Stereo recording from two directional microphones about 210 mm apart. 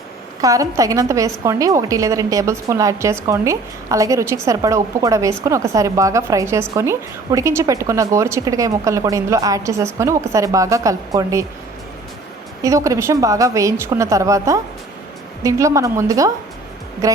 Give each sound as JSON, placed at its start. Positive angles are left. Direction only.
{"t": 0.4, "sound": "a woman's voice", "side_deg": -15}
{"t": 12.6, "sound": "a woman's voice", "side_deg": -15}